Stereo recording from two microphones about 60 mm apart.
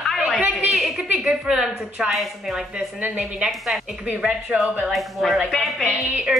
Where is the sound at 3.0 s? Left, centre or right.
Right.